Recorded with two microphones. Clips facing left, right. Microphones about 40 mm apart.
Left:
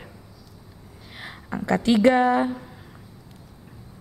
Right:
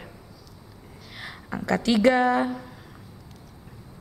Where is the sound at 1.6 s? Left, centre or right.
Left.